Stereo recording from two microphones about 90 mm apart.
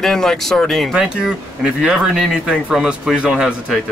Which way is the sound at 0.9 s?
10° right (ahead or behind).